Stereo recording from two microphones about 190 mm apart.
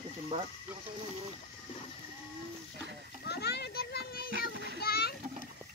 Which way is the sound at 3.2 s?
60° left (ahead or behind).